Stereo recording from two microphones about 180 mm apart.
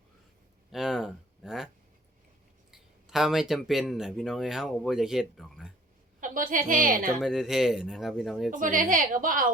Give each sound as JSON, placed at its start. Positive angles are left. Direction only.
{"t": 0.7, "sound": "speech", "side_deg": 0}
{"t": 2.7, "sound": "speech", "side_deg": 0}
{"t": 6.1, "sound": "a woman's voice", "side_deg": -50}
{"t": 7.2, "sound": "speech", "side_deg": 0}
{"t": 8.4, "sound": "a woman's voice", "side_deg": -50}